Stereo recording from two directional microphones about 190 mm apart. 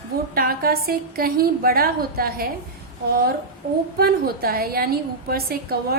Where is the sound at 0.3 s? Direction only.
50° right (ahead or behind).